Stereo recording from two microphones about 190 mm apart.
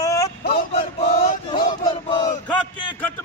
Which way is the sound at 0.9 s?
30° left (ahead or behind).